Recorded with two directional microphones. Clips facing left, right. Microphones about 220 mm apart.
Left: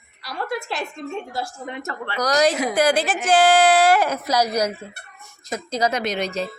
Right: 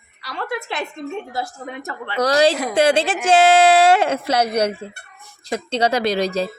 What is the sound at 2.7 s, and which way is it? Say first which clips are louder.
A woman's voice: right 3 dB; 25° right (ahead or behind).